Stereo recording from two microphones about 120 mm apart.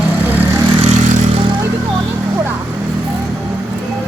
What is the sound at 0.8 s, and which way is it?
Vehicle, 70° right (ahead or behind).